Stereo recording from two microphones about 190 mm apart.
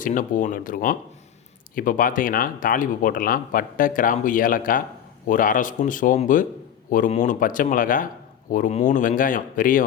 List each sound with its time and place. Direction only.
0.0 s speech: 45° left (ahead or behind)